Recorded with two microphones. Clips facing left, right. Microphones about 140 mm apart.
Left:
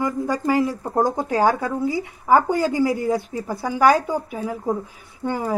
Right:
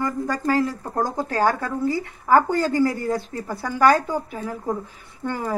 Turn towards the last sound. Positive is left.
turn(degrees=10)  # may be behind; listen again after turning